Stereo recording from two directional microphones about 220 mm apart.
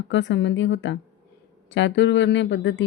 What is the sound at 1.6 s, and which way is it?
A woman's voice, 55° left (ahead or behind).